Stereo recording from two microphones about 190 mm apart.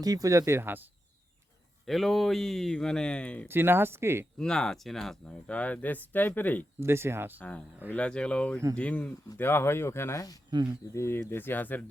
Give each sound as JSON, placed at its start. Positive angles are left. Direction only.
{"t": 0.0, "sound": "speech", "side_deg": -20}
{"t": 1.9, "sound": "speech", "side_deg": 0}
{"t": 3.5, "sound": "speech", "side_deg": -10}
{"t": 4.4, "sound": "speech", "side_deg": 5}
{"t": 6.7, "sound": "speech", "side_deg": -15}
{"t": 7.9, "sound": "speech", "side_deg": 5}